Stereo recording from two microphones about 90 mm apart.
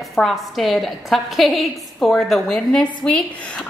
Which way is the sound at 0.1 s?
Centre (ahead or behind).